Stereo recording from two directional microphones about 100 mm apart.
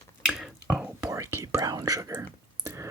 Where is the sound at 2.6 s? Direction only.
30° right (ahead or behind).